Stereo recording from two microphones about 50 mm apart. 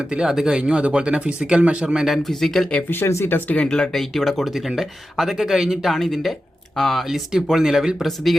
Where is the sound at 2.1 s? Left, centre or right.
Centre.